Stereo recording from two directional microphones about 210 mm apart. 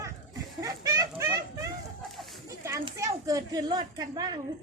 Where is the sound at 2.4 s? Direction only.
15° right (ahead or behind).